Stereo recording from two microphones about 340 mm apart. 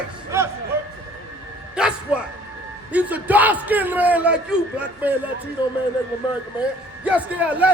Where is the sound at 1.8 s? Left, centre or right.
Centre.